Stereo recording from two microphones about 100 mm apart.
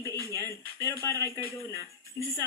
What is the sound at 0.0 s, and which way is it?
Music, 30° left (ahead or behind).